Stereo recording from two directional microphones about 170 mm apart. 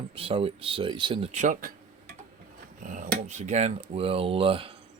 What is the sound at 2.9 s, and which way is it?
Speech, 50° right (ahead or behind).